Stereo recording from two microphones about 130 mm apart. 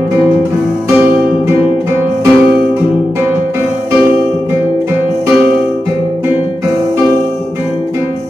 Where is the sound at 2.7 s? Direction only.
15° right (ahead or behind).